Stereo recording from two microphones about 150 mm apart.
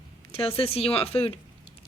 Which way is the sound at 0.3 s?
40° left (ahead or behind).